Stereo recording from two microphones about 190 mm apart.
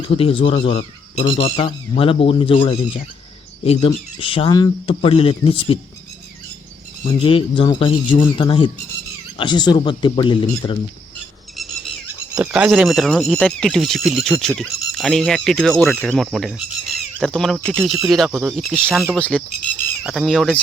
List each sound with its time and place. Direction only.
0.2 s speech: 30° left (ahead or behind)
7.1 s speech: 30° left (ahead or behind)
11.5 s bird: centre (ahead or behind)
12.0 s a sound: 10° right (ahead or behind)
12.5 s speech: 5° right (ahead or behind)